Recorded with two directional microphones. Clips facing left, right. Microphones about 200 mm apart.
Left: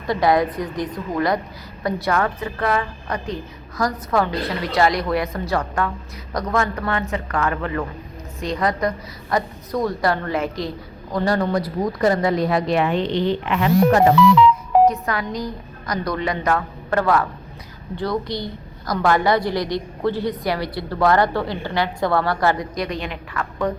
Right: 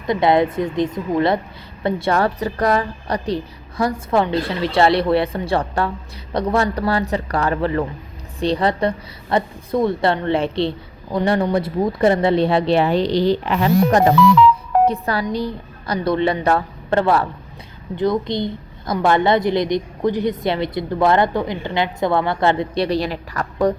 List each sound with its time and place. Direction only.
0.1 s a woman's voice: 25° right (ahead or behind)